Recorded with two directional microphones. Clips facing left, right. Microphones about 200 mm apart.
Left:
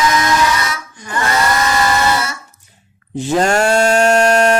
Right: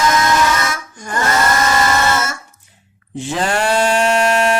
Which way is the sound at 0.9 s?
45° right (ahead or behind).